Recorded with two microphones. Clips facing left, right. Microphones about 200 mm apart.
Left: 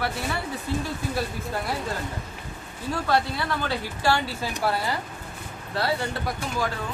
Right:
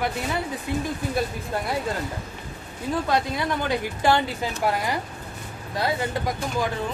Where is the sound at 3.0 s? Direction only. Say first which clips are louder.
Left 2 dB; 15° right (ahead or behind).